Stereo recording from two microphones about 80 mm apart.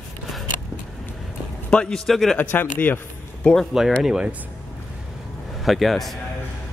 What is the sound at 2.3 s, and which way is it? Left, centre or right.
Speech, left.